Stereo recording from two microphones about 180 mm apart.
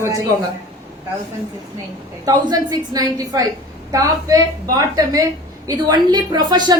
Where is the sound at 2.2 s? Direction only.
20° right (ahead or behind).